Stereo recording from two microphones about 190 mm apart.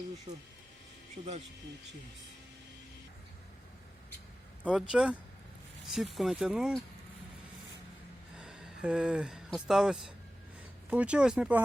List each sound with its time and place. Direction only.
0.3 s speech: 25° right (ahead or behind)
4.6 s speech: 5° right (ahead or behind)
8.4 s speech: 5° right (ahead or behind)